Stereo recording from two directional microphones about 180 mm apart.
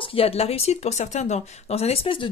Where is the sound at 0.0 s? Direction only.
30° left (ahead or behind).